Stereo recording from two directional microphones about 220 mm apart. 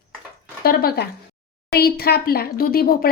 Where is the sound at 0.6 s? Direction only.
45° left (ahead or behind).